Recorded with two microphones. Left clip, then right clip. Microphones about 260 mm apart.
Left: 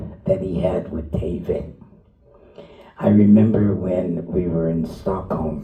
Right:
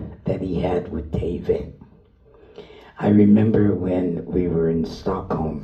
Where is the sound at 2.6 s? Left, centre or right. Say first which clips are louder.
Even; right.